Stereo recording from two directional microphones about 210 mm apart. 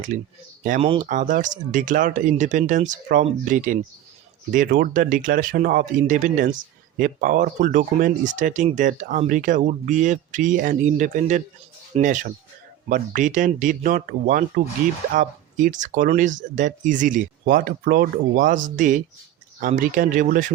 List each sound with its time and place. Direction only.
0.6 s speech: 40° right (ahead or behind)